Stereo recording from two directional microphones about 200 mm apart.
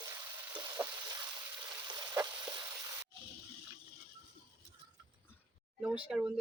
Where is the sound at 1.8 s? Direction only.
25° right (ahead or behind).